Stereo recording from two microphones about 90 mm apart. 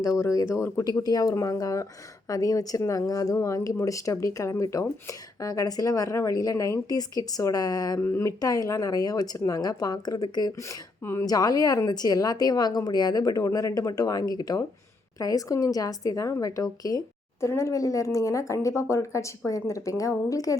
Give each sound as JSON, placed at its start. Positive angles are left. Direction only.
{"t": 0.2, "sound": "speech", "side_deg": 35}
{"t": 8.0, "sound": "speech", "side_deg": 25}
{"t": 8.4, "sound": "speech", "side_deg": 45}
{"t": 10.7, "sound": "speech", "side_deg": 30}
{"t": 11.3, "sound": "speech", "side_deg": 45}